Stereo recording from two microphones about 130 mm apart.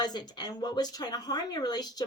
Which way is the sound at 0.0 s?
35° left (ahead or behind).